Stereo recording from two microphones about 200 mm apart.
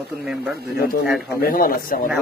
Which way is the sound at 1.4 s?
45° left (ahead or behind).